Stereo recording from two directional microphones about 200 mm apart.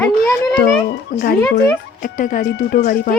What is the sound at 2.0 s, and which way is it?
Speech, 40° left (ahead or behind).